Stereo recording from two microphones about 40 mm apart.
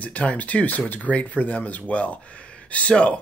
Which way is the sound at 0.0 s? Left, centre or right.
Left.